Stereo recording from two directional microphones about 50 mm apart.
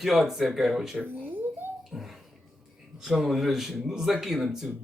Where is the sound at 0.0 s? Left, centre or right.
Centre.